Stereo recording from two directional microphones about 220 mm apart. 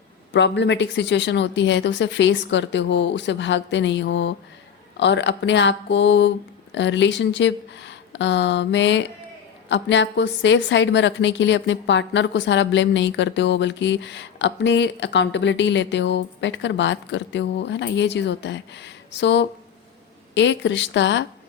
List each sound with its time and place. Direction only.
0.3 s a woman's voice: 55° left (ahead or behind)